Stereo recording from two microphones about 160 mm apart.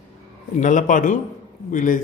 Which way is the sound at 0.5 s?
50° left (ahead or behind).